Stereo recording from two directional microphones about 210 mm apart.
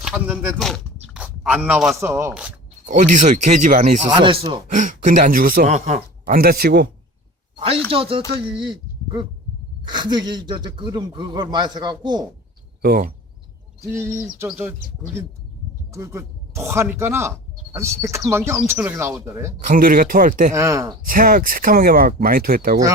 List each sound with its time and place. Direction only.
0.0 s speech: 5° right (ahead or behind)
1.1 s a sound: 5° right (ahead or behind)
2.0 s speech: 15° right (ahead or behind)
2.8 s speech: 35° right (ahead or behind)
4.1 s speech: 20° right (ahead or behind)
4.7 s speech: 35° right (ahead or behind)
7.5 s a sound: 25° right (ahead or behind)
7.9 s speech: 25° right (ahead or behind)
9.8 s speech: 20° right (ahead or behind)
12.8 s speech: 45° right (ahead or behind)
13.9 s speech: 10° right (ahead or behind)
19.5 s speech: 35° right (ahead or behind)
20.5 s speech: 15° right (ahead or behind)
21.1 s speech: 40° right (ahead or behind)